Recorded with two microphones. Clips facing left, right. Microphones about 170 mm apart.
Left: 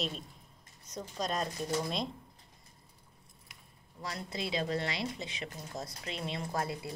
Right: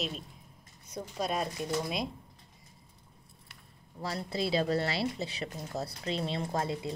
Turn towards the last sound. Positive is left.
turn(degrees=-25)  # may be behind; listen again after turning